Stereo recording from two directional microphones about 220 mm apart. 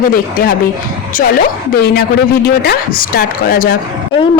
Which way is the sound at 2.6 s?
45° left (ahead or behind).